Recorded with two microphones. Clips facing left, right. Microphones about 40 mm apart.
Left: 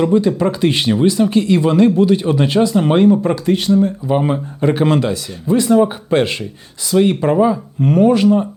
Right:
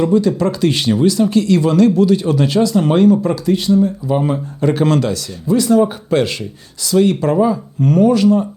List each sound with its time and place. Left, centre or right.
0.0 s speech: left